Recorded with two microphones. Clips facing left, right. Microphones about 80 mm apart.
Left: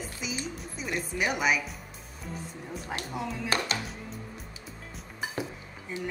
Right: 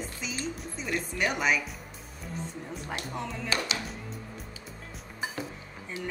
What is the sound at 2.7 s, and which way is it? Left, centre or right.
Speech, centre.